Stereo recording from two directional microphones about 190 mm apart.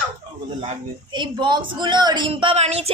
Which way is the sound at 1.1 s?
25° right (ahead or behind).